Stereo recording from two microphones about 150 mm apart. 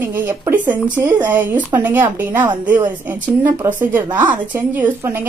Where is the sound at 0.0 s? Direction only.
15° right (ahead or behind).